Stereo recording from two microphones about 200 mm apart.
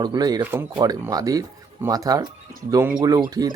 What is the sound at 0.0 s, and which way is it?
Speech, 20° right (ahead or behind).